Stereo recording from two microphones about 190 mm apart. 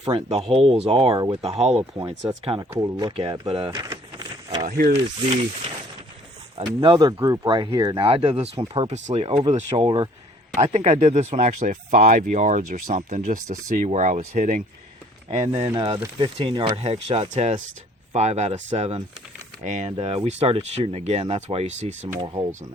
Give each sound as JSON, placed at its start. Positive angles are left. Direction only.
{"t": 0.0, "sound": "speech", "side_deg": -30}
{"t": 1.8, "sound": "speech", "side_deg": -20}
{"t": 3.7, "sound": "a sound", "side_deg": -15}
{"t": 6.6, "sound": "speech", "side_deg": -25}
{"t": 15.6, "sound": "speech", "side_deg": -20}
{"t": 22.2, "sound": "speech", "side_deg": -25}